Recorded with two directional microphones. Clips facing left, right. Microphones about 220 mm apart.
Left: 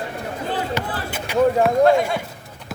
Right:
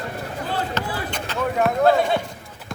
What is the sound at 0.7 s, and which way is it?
Basketball bounce, 10° left (ahead or behind).